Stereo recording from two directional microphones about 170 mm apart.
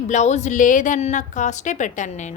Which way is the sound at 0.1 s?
45° left (ahead or behind).